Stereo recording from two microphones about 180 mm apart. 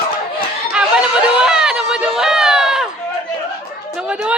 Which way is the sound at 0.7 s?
5° right (ahead or behind).